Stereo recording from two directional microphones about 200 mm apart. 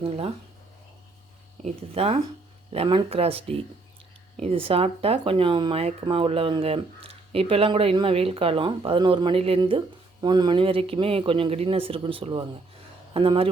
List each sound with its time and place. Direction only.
0.0 s speech: 25° right (ahead or behind)
1.6 s speech: 30° right (ahead or behind)